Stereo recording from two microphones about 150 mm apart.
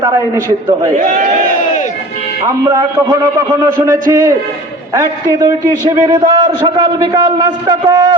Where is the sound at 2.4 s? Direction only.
20° right (ahead or behind).